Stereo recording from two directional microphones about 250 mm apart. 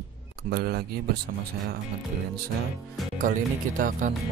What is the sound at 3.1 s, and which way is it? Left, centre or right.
Speech, right.